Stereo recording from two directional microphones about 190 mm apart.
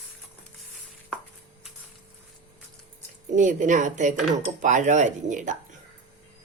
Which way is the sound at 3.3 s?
40° right (ahead or behind).